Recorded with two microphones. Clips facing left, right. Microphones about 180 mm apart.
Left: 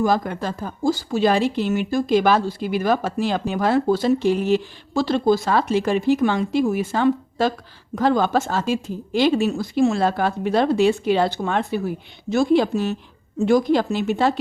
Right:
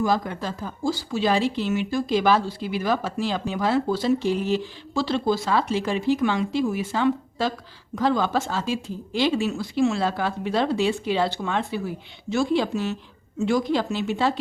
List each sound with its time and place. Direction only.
0.0 s speech: 50° left (ahead or behind)